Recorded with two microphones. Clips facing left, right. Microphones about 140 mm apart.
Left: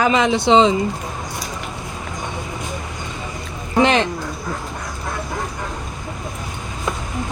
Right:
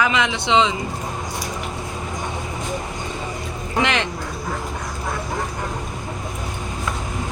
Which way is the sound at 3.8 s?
35° left (ahead or behind).